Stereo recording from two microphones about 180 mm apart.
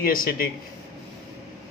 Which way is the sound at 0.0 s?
55° left (ahead or behind).